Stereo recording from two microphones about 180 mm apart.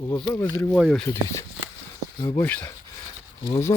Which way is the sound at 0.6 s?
5° left (ahead or behind).